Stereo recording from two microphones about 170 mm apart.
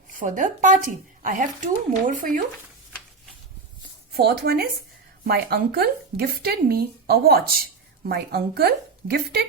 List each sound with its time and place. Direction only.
0.2 s a woman's voice: 50° right (ahead or behind)
4.1 s speech: 65° right (ahead or behind)